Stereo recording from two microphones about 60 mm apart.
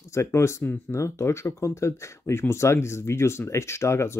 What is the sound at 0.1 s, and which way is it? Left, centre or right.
Speech, left.